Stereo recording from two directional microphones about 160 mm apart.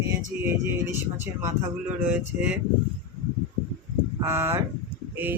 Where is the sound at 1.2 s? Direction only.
15° right (ahead or behind).